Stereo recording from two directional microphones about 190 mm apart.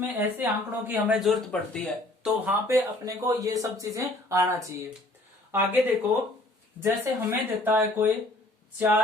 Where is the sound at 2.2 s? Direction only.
10° right (ahead or behind).